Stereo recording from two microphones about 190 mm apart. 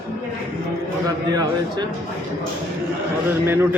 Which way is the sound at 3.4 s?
10° right (ahead or behind).